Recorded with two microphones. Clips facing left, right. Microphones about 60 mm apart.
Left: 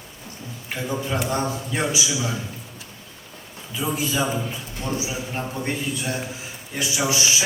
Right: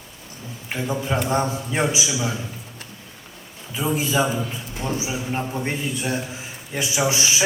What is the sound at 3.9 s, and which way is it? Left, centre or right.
A man's voice, right.